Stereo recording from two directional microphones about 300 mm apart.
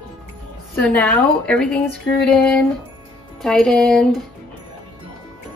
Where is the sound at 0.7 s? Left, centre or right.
Centre.